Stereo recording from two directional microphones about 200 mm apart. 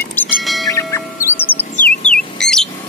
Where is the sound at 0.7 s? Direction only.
15° left (ahead or behind).